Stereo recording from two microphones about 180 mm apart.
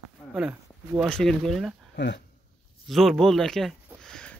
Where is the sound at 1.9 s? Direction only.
75° left (ahead or behind).